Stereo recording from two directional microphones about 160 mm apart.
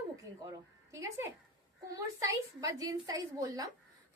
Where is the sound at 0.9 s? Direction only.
20° right (ahead or behind).